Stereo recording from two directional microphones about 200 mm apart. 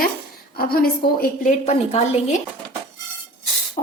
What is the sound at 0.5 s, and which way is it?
A woman's voice, 50° left (ahead or behind).